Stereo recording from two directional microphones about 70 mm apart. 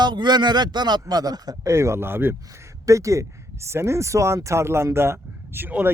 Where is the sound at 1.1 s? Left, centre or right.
Right.